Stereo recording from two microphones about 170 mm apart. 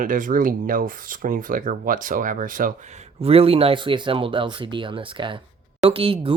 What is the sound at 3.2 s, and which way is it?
Speech, 35° right (ahead or behind).